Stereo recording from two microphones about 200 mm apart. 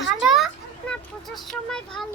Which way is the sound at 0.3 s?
Centre (ahead or behind).